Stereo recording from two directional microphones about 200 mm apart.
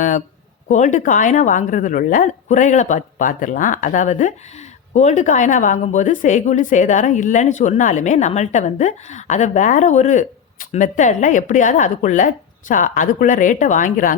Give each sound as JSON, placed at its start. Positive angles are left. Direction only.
{"t": 0.7, "sound": "a woman's voice", "side_deg": 35}